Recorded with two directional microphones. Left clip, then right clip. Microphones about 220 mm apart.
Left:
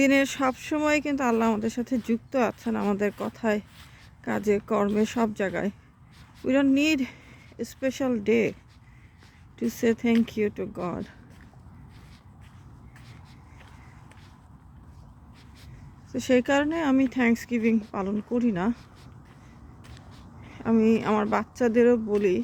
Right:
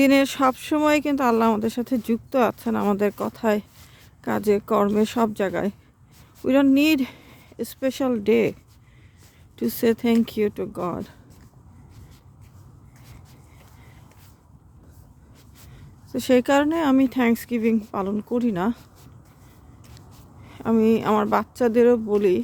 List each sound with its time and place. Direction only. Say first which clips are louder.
0.0 s speech: right 4 dB; 20° right (ahead or behind)
9.6 s speech: right 4 dB; 25° right (ahead or behind)
16.1 s speech: right 4 dB; 20° right (ahead or behind)
20.5 s speech: right 3 dB; 15° right (ahead or behind)